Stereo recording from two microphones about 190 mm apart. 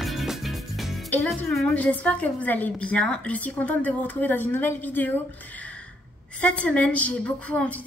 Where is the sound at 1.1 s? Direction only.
5° left (ahead or behind).